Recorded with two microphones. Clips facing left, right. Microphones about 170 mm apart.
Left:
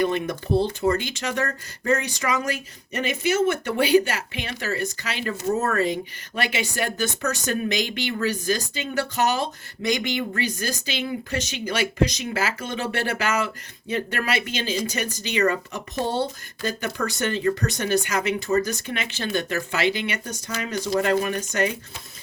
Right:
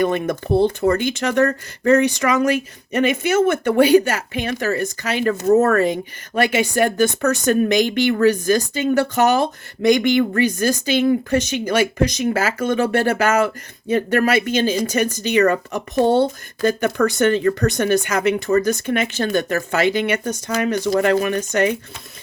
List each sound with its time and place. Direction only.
0.0 s speech: 50° right (ahead or behind)